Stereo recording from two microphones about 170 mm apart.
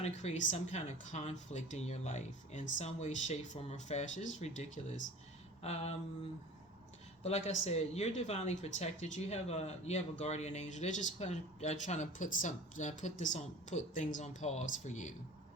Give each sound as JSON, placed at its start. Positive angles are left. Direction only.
{"t": 0.0, "sound": "speech", "side_deg": 40}
{"t": 7.2, "sound": "speech", "side_deg": 40}